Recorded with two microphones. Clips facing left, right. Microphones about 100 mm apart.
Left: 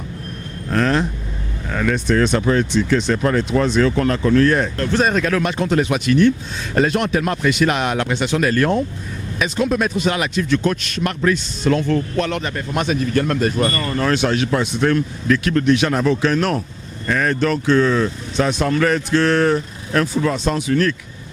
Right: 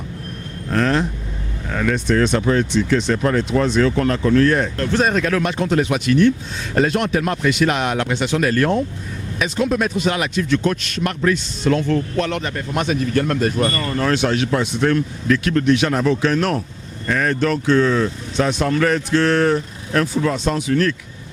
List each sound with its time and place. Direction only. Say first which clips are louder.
0.7 s speech: even; 15° left (ahead or behind)